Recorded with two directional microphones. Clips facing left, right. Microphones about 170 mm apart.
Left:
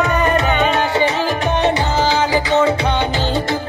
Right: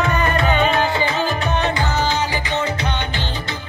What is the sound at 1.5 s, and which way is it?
Music, 25° left (ahead or behind).